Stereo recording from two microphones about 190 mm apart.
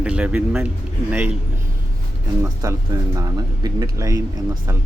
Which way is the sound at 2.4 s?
15° right (ahead or behind).